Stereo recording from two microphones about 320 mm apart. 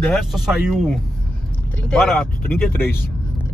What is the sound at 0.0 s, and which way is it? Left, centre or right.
A woman's voice, centre.